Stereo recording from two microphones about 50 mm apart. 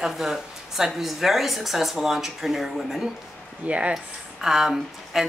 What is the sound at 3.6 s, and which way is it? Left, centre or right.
Speech, right.